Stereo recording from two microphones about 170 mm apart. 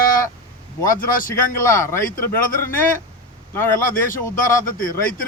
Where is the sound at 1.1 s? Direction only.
55° left (ahead or behind).